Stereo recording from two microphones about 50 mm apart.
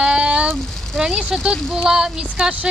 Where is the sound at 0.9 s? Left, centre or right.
Centre.